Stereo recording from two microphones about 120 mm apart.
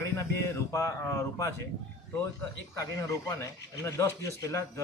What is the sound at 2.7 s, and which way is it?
Speech, 25° left (ahead or behind).